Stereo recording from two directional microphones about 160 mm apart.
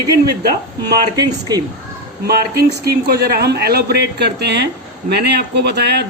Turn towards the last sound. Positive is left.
turn(degrees=-90)